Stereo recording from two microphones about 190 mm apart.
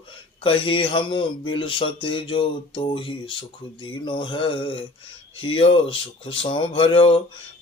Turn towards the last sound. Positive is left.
turn(degrees=25)  # may be behind; listen again after turning